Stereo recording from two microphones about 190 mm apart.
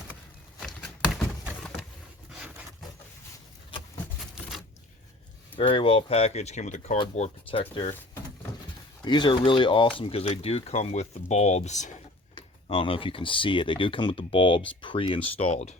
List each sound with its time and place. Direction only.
0.6 s a sound: centre (ahead or behind)
5.5 s speech: 25° left (ahead or behind)
7.0 s speech: 30° left (ahead or behind)
9.0 s speech: 25° left (ahead or behind)
12.3 s speech: 30° left (ahead or behind)